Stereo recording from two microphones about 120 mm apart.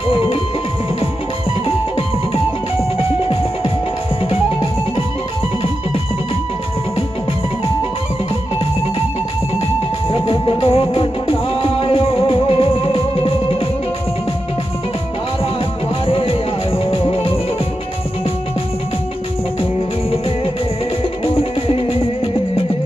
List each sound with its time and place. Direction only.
0.1 s music: 50° left (ahead or behind)
1.6 s music: 50° left (ahead or behind)
10.1 s music: 45° left (ahead or behind)
16.0 s music: 50° left (ahead or behind)
20.1 s music: 50° left (ahead or behind)